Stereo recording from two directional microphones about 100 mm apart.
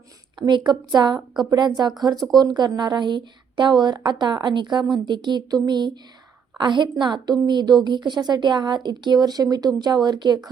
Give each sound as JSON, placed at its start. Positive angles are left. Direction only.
{"t": 0.3, "sound": "a woman's voice", "side_deg": -45}